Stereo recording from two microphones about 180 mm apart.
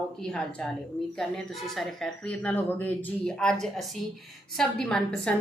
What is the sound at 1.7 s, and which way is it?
A woman's voice, 5° left (ahead or behind).